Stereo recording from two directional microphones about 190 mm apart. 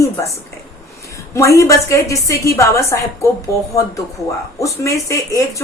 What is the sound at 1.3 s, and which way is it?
Speech, 15° left (ahead or behind).